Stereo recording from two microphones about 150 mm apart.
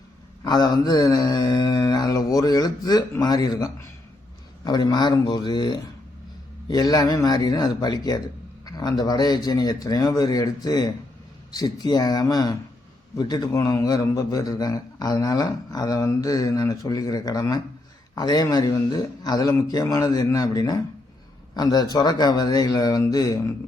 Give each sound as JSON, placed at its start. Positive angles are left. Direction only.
{"t": 0.4, "sound": "a man's voice", "side_deg": 25}